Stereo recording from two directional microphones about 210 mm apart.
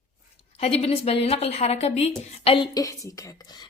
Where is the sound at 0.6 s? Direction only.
30° left (ahead or behind).